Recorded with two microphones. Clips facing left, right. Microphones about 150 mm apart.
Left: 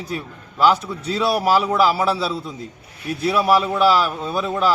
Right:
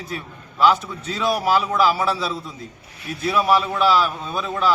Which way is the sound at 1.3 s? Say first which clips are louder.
Left 1 dB; 5° left (ahead or behind).